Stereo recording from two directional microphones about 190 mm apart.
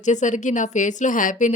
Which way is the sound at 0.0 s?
40° left (ahead or behind).